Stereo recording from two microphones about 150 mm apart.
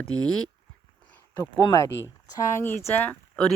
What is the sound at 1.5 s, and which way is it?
Speech, 25° left (ahead or behind).